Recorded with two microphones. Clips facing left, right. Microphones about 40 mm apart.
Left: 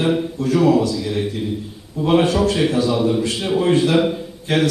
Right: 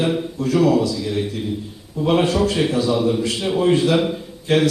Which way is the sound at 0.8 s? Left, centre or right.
Left.